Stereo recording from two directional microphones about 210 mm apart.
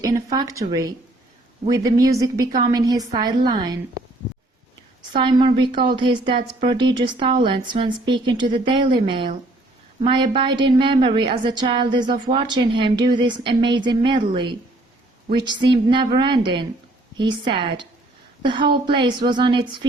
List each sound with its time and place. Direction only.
0.0 s a woman's voice: 15° right (ahead or behind)
5.1 s a woman's voice: 20° right (ahead or behind)